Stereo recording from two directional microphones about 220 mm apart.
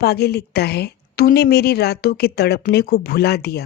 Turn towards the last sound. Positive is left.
turn(degrees=45)  # may be behind; listen again after turning